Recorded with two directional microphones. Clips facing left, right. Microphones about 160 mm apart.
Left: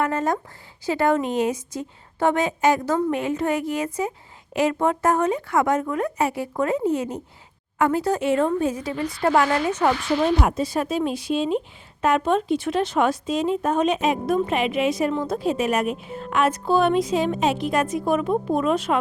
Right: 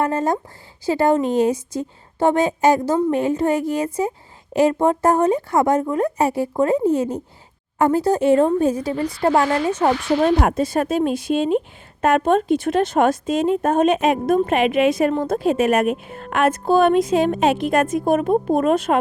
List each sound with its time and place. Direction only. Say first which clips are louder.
0.0 s a woman's voice: right 3 dB; 30° right (ahead or behind)
10.2 s a woman's voice: right 4 dB; 50° right (ahead or behind)